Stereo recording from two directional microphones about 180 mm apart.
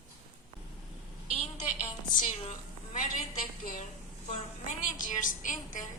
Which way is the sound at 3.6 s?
50° left (ahead or behind).